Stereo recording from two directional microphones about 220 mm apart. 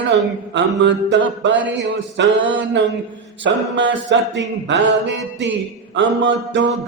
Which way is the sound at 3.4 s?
55° right (ahead or behind).